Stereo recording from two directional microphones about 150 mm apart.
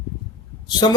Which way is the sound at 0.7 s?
30° left (ahead or behind).